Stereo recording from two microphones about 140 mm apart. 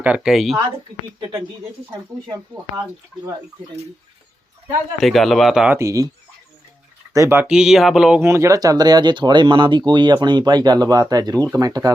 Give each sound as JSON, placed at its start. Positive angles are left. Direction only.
{"t": 0.0, "sound": "speech", "side_deg": -5}
{"t": 4.9, "sound": "speech", "side_deg": 0}
{"t": 5.7, "sound": "speech", "side_deg": -20}
{"t": 7.1, "sound": "speech", "side_deg": -20}
{"t": 7.4, "sound": "speech", "side_deg": -5}
{"t": 8.2, "sound": "speech", "side_deg": -20}